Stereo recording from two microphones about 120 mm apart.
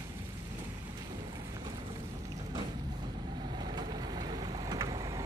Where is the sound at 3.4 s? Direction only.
35° right (ahead or behind).